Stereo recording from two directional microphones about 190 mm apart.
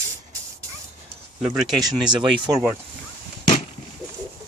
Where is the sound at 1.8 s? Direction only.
20° right (ahead or behind).